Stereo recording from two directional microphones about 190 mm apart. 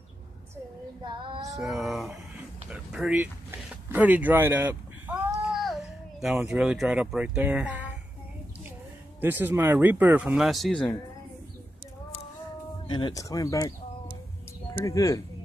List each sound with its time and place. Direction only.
1.0 s child singing: 25° right (ahead or behind)
1.6 s speech: centre (ahead or behind)
3.9 s a sound: 10° right (ahead or behind)
5.6 s a child's voice: centre (ahead or behind)
9.2 s speech: 10° right (ahead or behind)
12.8 s speech: 25° left (ahead or behind)